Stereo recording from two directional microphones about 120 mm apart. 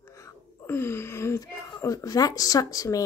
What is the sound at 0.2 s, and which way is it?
Speech, 20° left (ahead or behind).